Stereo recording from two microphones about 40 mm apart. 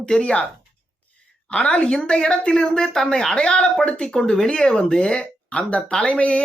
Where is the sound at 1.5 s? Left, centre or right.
Left.